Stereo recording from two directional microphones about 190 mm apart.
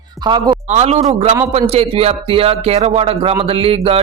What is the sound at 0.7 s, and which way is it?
Speech, 35° right (ahead or behind).